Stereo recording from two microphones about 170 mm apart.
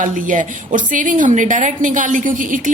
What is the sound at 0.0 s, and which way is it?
A woman's voice, 50° right (ahead or behind).